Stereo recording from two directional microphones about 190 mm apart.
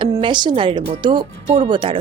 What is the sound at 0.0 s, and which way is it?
Speech, 25° right (ahead or behind).